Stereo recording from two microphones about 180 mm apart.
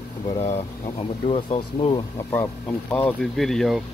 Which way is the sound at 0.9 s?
30° left (ahead or behind).